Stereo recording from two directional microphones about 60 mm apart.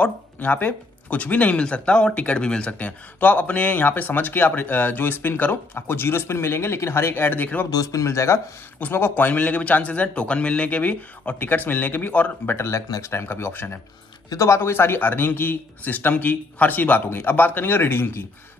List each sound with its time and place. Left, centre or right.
0.0 s speech: left
7.7 s speech: left
8.9 s speech: left
12.5 s speech: left
14.3 s speech: left